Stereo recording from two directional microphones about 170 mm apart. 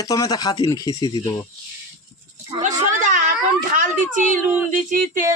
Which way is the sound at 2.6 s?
45° right (ahead or behind).